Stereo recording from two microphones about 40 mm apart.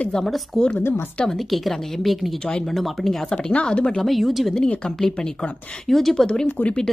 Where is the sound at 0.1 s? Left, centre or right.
Centre.